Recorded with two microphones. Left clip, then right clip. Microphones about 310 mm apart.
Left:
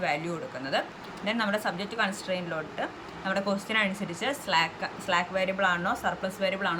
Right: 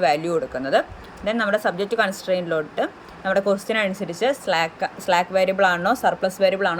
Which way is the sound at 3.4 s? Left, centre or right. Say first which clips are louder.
Right 7 dB; centre.